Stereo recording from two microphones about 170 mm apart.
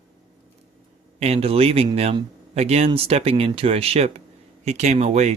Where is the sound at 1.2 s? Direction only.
35° right (ahead or behind).